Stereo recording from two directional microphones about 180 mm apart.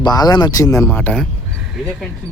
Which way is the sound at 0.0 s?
20° left (ahead or behind).